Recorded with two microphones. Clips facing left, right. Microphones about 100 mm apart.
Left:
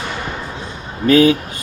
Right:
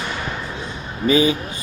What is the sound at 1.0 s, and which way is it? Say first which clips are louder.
Speech: left 5 dB; 75° left (ahead or behind).